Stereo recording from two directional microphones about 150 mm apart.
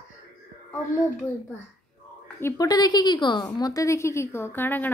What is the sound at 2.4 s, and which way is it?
A woman's voice, 25° left (ahead or behind).